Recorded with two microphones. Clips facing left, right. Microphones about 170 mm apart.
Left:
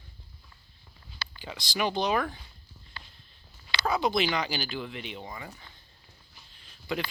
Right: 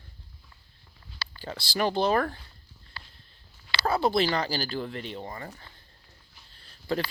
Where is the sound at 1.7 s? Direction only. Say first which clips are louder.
Right 3 dB; 35° right (ahead or behind).